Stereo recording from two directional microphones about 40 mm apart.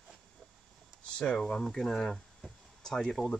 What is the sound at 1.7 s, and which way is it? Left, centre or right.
Speech, centre.